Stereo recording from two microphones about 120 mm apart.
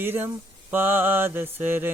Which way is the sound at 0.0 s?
15° right (ahead or behind).